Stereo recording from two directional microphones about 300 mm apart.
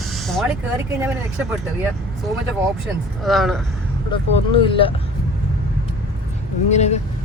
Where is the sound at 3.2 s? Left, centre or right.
Centre.